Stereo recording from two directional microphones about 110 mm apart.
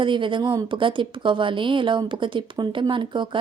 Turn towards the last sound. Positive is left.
turn(degrees=-45)  # may be behind; listen again after turning